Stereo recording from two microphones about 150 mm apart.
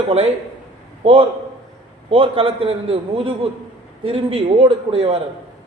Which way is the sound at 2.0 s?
35° right (ahead or behind).